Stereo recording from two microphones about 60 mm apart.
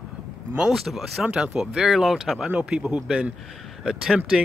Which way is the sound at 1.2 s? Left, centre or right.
Centre.